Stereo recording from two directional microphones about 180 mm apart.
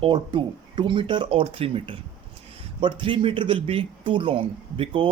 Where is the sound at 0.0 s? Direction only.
25° right (ahead or behind).